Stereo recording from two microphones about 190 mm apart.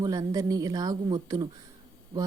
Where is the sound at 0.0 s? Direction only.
20° right (ahead or behind).